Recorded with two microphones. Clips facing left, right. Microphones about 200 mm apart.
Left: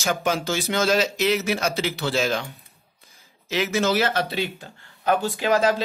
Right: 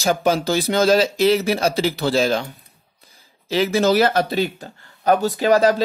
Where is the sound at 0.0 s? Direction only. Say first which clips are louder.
Right 5 dB; 35° right (ahead or behind).